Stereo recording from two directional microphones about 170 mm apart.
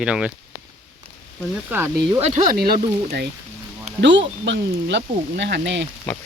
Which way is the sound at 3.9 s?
90° right.